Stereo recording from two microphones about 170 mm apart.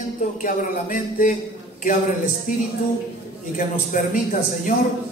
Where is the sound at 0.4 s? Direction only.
50° left (ahead or behind).